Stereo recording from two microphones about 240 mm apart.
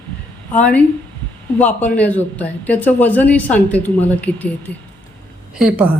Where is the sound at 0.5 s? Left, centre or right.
Centre.